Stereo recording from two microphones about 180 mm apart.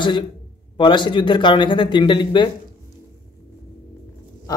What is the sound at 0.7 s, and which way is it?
A man's voice, 25° left (ahead or behind).